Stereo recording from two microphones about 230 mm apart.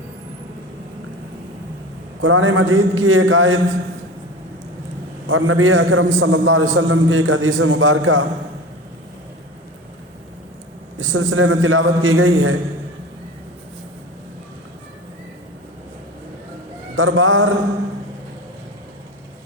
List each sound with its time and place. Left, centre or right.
2.2 s a man's voice: right
5.2 s a man's voice: right
10.9 s a man's voice: right
16.9 s a man's voice: right